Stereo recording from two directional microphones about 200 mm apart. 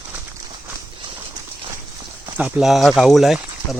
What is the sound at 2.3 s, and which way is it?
Speech, 10° right (ahead or behind).